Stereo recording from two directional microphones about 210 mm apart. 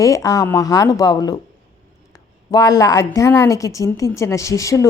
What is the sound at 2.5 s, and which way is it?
A woman's voice, 20° left (ahead or behind).